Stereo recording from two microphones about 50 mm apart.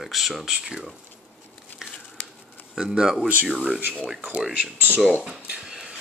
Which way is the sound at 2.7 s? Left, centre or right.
Centre.